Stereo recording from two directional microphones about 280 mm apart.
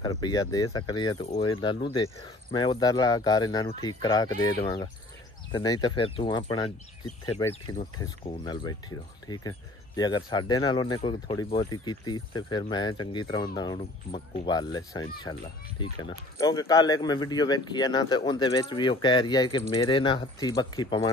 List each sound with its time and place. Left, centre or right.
0.0 s speech: centre